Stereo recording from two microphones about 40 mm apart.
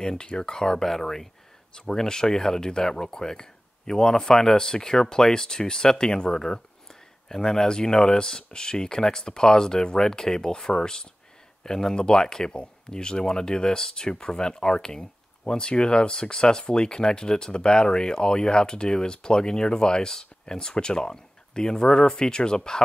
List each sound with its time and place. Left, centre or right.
0.0 s speech: centre